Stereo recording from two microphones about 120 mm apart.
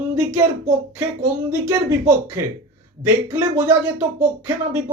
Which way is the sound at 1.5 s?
20° right (ahead or behind).